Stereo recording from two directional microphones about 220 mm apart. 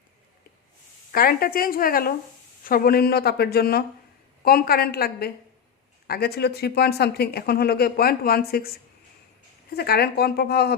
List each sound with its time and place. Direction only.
1.1 s a woman's voice: 40° left (ahead or behind)
9.7 s speech: 45° left (ahead or behind)